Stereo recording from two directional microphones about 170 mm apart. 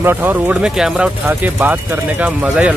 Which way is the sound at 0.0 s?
10° right (ahead or behind).